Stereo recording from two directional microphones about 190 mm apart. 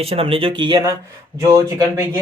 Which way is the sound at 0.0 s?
30° right (ahead or behind).